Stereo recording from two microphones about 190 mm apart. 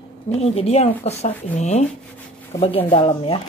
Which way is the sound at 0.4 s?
35° left (ahead or behind).